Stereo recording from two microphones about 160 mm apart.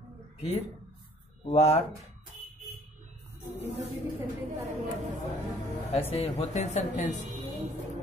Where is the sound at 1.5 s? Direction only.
40° left (ahead or behind).